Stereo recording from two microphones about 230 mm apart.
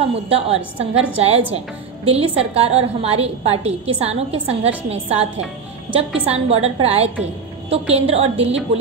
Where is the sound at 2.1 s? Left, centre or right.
Right.